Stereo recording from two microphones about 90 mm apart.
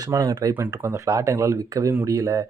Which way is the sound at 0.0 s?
40° right (ahead or behind).